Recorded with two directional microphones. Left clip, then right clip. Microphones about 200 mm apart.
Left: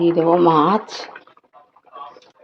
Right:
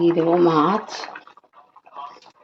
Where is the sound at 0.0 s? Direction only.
5° left (ahead or behind).